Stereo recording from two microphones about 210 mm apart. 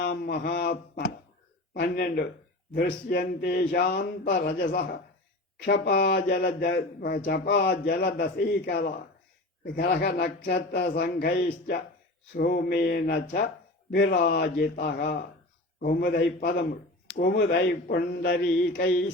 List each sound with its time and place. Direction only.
0.0 s speech: 45° left (ahead or behind)